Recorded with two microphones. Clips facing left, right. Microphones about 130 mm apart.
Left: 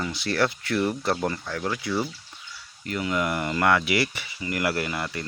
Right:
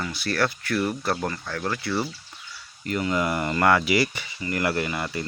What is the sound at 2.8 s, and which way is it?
Speech, 5° left (ahead or behind).